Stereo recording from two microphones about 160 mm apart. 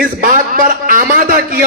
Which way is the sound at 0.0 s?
60° right (ahead or behind).